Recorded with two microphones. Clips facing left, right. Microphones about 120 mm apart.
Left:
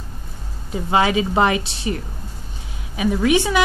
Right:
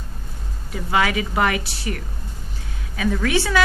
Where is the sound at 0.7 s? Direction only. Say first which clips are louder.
Left 3 dB; 25° left (ahead or behind).